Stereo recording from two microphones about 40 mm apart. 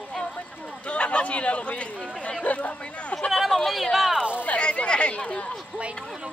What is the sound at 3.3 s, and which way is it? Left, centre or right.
Speech, centre.